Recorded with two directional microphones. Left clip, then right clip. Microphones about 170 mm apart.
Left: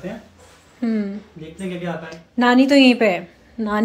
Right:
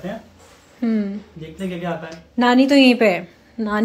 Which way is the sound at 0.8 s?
Centre (ahead or behind).